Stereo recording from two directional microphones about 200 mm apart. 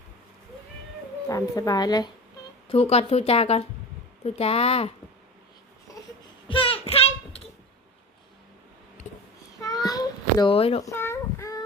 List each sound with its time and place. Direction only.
1.3 s speech: 20° left (ahead or behind)
2.6 s speech: 30° left (ahead or behind)
6.5 s child singing: 25° left (ahead or behind)
9.6 s a sound: 20° left (ahead or behind)
10.8 s child singing: 10° left (ahead or behind)